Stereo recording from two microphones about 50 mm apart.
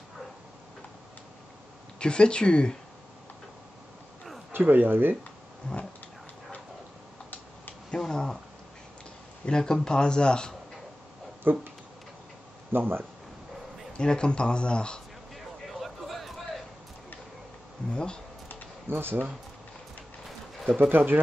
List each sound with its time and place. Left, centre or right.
2.0 s speech: centre
4.5 s speech: right
5.6 s speech: centre
7.9 s speech: centre
9.5 s speech: centre
11.4 s speech: right
12.7 s speech: right
13.9 s speech: centre
15.3 s a sound: centre
17.9 s speech: centre
18.9 s speech: right
20.6 s speech: centre
20.9 s speech: right